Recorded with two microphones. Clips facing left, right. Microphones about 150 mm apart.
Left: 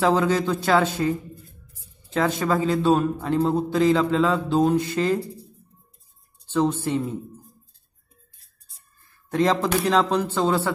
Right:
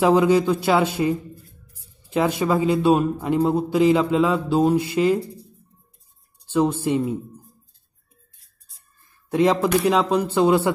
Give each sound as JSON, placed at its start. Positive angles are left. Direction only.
{"t": 0.0, "sound": "a man's voice", "side_deg": -15}
{"t": 6.5, "sound": "a man's voice", "side_deg": -10}
{"t": 9.3, "sound": "a man's voice", "side_deg": -10}